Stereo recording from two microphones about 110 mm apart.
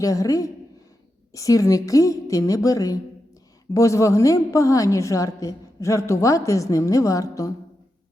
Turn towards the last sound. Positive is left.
turn(degrees=30)  # may be behind; listen again after turning